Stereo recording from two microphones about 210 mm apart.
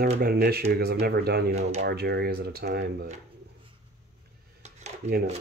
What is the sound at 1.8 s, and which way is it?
Speech, 50° right (ahead or behind).